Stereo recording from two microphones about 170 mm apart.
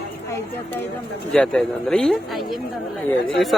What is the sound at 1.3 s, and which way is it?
Speech, 5° left (ahead or behind).